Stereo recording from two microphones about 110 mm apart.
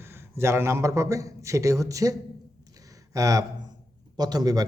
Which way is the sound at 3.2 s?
35° right (ahead or behind).